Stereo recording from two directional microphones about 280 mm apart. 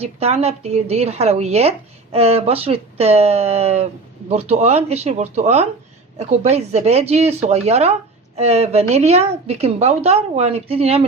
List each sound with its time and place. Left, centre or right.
0.0 s a woman's voice: right